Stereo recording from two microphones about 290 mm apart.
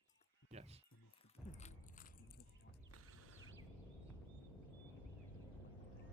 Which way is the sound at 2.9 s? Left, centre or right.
Right.